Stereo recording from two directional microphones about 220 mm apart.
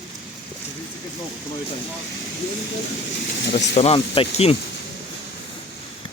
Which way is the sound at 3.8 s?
25° left (ahead or behind).